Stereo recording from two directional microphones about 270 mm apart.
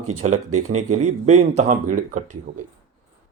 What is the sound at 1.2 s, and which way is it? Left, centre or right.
Speech, right.